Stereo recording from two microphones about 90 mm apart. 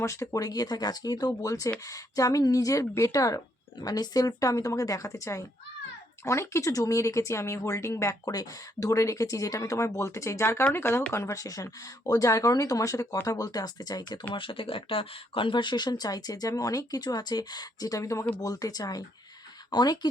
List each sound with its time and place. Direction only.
0.0 s speech: 35° left (ahead or behind)
14.3 s speech: 80° left; by 20.1 s 50° left (ahead or behind)